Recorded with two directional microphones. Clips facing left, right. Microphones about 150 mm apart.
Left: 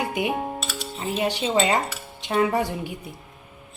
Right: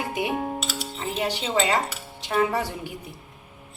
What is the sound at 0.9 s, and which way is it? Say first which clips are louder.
Speech: left 3 dB; 20° left (ahead or behind).